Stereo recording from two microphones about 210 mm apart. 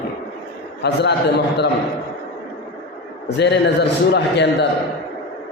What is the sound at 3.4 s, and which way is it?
A man's voice, 55° left (ahead or behind).